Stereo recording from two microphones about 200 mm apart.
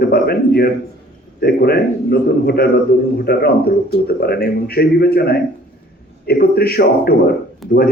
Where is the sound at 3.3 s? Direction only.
50° left (ahead or behind).